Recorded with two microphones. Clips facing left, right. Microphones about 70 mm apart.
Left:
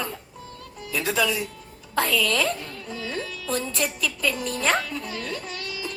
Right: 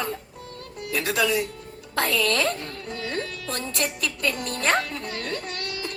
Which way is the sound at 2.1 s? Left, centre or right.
Right.